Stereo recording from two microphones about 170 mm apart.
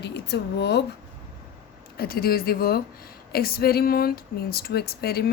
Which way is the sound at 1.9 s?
65° left (ahead or behind).